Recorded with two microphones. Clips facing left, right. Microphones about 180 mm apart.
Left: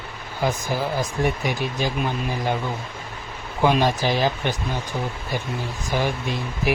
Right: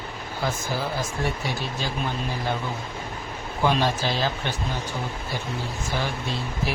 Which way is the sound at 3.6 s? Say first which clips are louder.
Left 4 dB; 15° left (ahead or behind).